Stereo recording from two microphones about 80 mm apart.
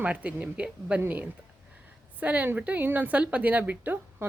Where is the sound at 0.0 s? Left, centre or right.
Centre.